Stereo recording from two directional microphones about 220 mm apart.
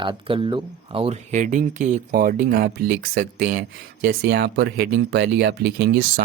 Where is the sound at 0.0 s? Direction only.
25° right (ahead or behind).